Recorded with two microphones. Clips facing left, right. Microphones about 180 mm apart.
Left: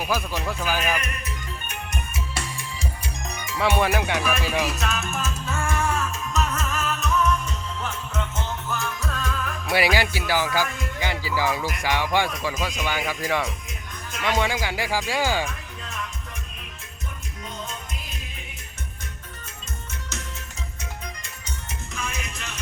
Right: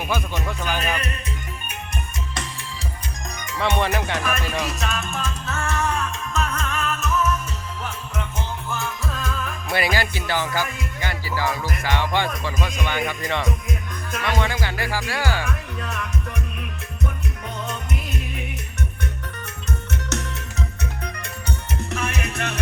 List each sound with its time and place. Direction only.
0.1 s music: centre (ahead or behind)
3.4 s music: 5° left (ahead or behind); by 8.8 s 10° right (ahead or behind)
9.6 s music: 10° left (ahead or behind)
15.4 s music: 65° right (ahead or behind)
17.7 s music: 65° right (ahead or behind)
20.1 s music: 70° right (ahead or behind)